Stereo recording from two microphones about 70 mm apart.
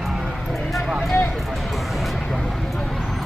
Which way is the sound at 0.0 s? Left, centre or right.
Centre.